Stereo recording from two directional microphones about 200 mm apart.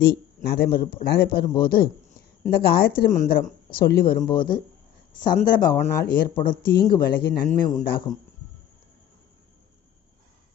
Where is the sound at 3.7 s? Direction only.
50° left (ahead or behind).